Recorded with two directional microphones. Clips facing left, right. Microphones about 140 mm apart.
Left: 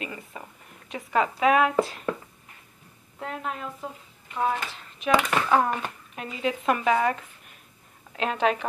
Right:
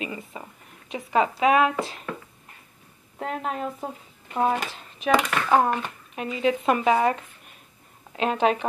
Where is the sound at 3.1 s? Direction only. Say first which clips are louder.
Right 4 dB; 35° right (ahead or behind).